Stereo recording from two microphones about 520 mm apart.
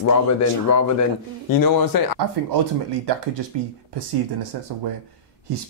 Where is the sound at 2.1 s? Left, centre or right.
Right.